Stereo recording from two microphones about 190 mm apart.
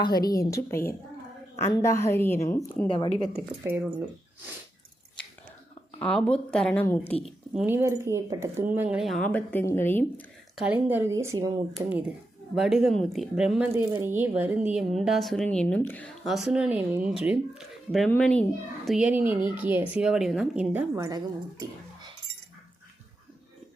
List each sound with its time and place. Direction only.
0.3 s a woman's voice: 15° left (ahead or behind)
2.8 s speech: 25° left (ahead or behind)
3.6 s speech: 10° right (ahead or behind)
6.0 s speech: 5° left (ahead or behind)
7.5 s speech: 10° right (ahead or behind); by 10.2 s 10° left (ahead or behind)
10.5 s speech: 10° right (ahead or behind)